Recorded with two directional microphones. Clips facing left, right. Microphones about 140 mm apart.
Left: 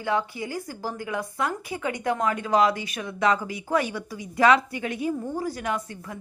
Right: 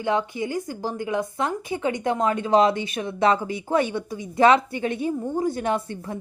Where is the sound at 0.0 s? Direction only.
20° right (ahead or behind).